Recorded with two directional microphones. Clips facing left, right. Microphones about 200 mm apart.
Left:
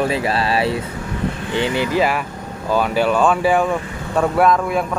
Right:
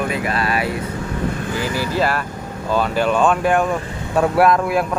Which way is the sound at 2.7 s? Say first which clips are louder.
Left 1 dB; 10° left (ahead or behind).